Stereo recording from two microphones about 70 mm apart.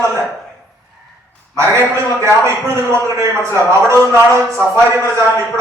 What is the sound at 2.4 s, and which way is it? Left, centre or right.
A man's voice, right.